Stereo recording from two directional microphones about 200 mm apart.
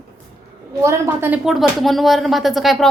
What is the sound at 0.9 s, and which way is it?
Speech, 15° right (ahead or behind).